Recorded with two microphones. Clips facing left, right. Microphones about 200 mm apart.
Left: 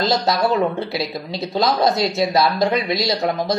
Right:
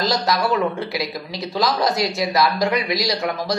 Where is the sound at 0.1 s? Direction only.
25° left (ahead or behind).